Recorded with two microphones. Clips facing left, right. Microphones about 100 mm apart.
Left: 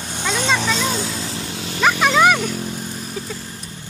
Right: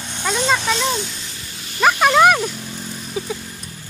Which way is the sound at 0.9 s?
40° left (ahead or behind).